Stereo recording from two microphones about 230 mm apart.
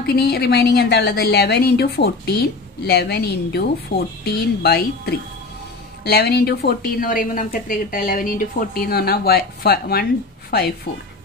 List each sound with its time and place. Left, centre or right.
0.0 s a woman's voice: left